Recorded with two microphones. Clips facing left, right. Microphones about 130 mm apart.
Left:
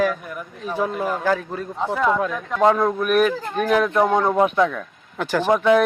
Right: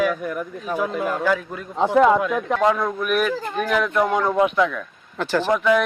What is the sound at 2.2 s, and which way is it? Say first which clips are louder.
Speech: even; 25° left (ahead or behind).